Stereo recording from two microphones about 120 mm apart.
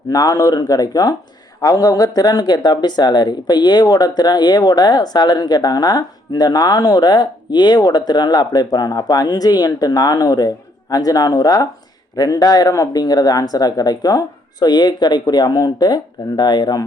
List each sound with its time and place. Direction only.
0.1 s speech: 30° left (ahead or behind)